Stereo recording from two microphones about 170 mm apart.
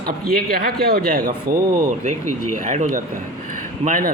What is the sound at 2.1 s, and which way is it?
A man's voice, 45° right (ahead or behind).